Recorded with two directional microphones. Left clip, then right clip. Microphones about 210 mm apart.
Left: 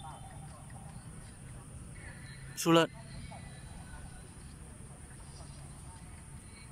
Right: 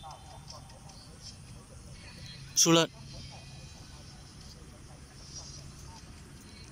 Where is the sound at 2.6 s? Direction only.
Centre (ahead or behind).